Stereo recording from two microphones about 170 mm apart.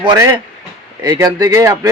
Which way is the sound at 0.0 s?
20° right (ahead or behind).